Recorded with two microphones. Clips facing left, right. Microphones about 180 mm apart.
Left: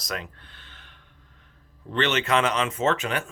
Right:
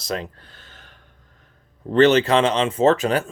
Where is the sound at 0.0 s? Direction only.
30° right (ahead or behind).